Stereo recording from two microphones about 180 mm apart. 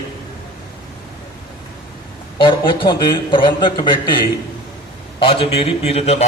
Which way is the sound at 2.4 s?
25° left (ahead or behind).